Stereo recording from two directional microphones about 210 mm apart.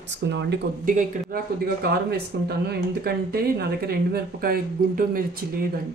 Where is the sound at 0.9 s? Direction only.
40° right (ahead or behind).